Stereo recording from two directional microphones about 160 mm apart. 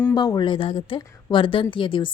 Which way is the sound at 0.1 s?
25° left (ahead or behind).